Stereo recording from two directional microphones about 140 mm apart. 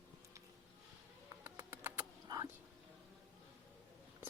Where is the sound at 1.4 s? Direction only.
20° right (ahead or behind).